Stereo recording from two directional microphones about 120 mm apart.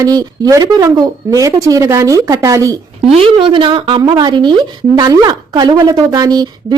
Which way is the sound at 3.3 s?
45° right (ahead or behind).